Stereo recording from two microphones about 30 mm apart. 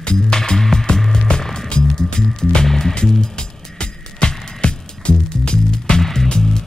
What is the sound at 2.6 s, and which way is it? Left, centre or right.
Music, centre.